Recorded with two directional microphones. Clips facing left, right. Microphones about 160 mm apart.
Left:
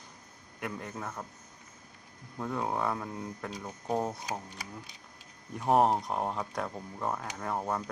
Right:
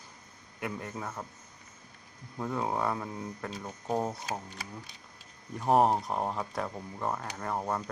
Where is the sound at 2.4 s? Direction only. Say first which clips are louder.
Right 1 dB; centre (ahead or behind).